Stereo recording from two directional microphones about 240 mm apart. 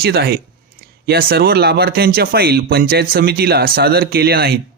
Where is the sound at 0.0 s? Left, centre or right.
Right.